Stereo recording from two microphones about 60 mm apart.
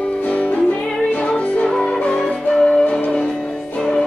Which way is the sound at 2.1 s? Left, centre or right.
Centre.